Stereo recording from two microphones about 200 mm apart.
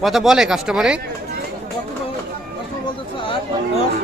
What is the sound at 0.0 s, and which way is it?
Speech, centre (ahead or behind).